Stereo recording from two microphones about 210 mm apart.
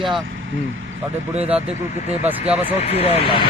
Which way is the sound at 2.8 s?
30° left (ahead or behind).